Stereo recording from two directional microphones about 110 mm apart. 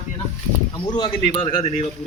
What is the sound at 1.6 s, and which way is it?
Speech, 90° left.